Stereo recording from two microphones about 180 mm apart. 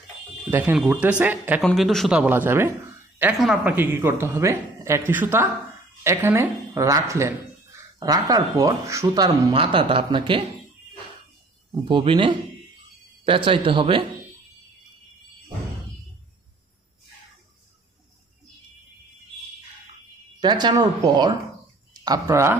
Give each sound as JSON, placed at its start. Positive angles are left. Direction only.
{"t": 0.5, "sound": "speech", "side_deg": -10}
{"t": 1.6, "sound": "speech", "side_deg": 0}
{"t": 3.3, "sound": "speech", "side_deg": 0}
{"t": 11.7, "sound": "speech", "side_deg": -25}
{"t": 20.4, "sound": "speech", "side_deg": -25}